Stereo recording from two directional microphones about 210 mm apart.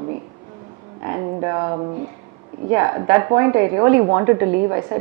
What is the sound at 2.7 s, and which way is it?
Speech, 15° right (ahead or behind).